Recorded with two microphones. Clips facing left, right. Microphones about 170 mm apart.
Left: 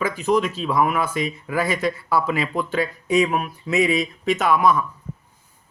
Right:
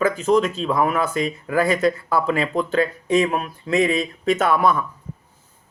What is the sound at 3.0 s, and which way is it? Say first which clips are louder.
Speech: even; 35° right (ahead or behind).